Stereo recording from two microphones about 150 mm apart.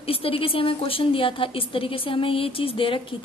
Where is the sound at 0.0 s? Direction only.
40° left (ahead or behind).